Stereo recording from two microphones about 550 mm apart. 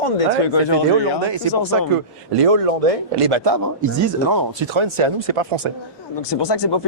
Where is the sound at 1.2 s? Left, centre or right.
Right.